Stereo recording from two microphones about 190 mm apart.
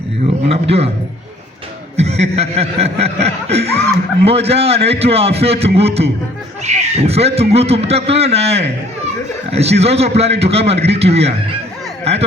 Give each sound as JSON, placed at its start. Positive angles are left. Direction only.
{"t": 0.4, "sound": "a man's voice", "side_deg": -30}
{"t": 2.0, "sound": "a man's voice", "side_deg": -35}